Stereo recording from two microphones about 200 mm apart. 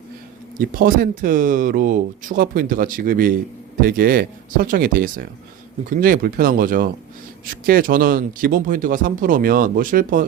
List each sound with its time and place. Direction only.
0.6 s speech: 45° right (ahead or behind)